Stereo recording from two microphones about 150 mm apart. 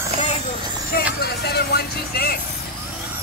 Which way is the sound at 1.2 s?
90° left.